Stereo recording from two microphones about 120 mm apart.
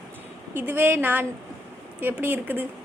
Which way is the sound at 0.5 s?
15° right (ahead or behind).